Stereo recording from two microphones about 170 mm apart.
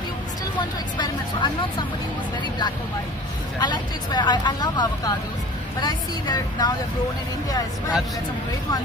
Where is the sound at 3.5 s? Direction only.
25° left (ahead or behind).